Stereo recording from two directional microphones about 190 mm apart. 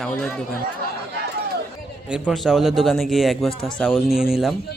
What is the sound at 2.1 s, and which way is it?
A man's voice, centre (ahead or behind).